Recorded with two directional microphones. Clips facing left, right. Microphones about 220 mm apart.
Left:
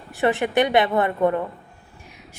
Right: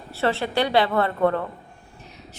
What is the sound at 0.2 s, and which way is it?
A woman's voice, 15° left (ahead or behind).